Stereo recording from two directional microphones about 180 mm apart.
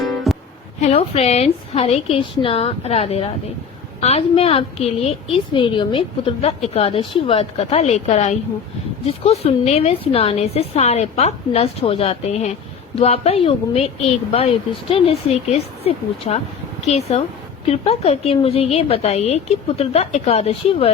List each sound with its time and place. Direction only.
0.3 s music: centre (ahead or behind)
0.8 s a woman's voice: 35° left (ahead or behind)